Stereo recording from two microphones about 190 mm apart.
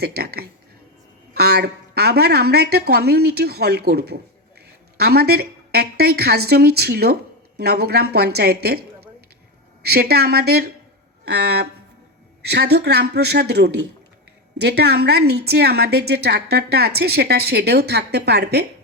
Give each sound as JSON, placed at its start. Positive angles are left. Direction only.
{"t": 0.0, "sound": "a woman's voice", "side_deg": -55}
{"t": 9.8, "sound": "a woman's voice", "side_deg": -55}